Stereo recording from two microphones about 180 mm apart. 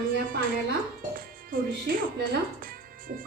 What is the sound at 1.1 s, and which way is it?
Music, 55° right (ahead or behind).